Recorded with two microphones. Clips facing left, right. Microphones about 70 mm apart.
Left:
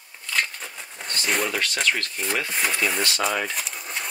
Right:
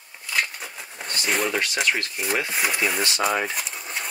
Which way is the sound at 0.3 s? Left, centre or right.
Centre.